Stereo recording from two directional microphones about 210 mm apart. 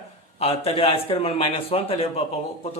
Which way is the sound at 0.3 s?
30° left (ahead or behind).